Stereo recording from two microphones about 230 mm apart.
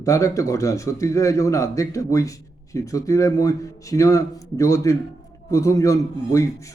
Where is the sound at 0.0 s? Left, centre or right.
Centre.